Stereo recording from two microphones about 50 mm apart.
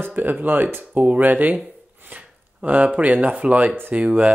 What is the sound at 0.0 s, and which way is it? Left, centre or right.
Speech, right.